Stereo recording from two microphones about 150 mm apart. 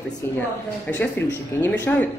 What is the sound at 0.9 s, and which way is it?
A woman's voice, 10° left (ahead or behind).